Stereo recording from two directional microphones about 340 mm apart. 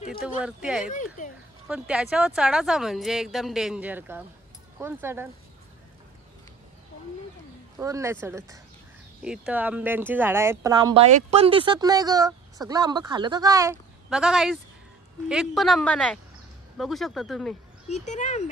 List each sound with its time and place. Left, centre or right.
0.2 s a woman's voice: centre
0.9 s speech: left
1.7 s a woman's voice: centre
7.7 s a woman's voice: centre
17.8 s speech: centre